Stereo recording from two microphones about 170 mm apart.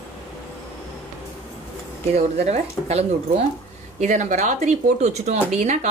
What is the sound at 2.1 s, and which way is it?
Speech, 40° right (ahead or behind).